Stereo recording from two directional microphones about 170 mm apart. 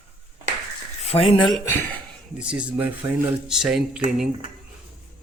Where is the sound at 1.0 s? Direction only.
35° left (ahead or behind).